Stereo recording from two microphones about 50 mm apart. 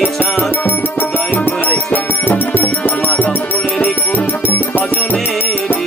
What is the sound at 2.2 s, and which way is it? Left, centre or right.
Music, left.